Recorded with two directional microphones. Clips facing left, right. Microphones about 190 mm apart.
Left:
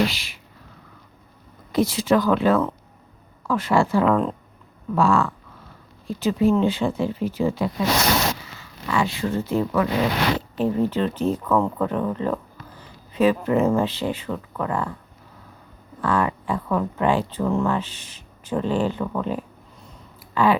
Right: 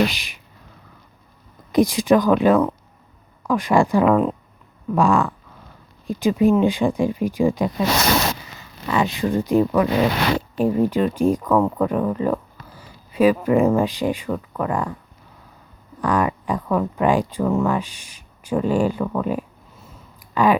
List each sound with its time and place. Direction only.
0.0 s speech: 15° right (ahead or behind)
1.7 s speech: 15° right (ahead or behind)
16.0 s speech: 15° right (ahead or behind)
20.3 s a sound: 15° right (ahead or behind)